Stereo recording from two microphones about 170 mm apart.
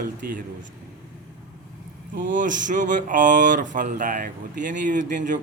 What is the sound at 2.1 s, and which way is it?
Speech, 50° right (ahead or behind).